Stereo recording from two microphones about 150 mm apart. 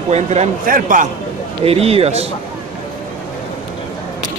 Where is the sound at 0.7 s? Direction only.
65° right (ahead or behind).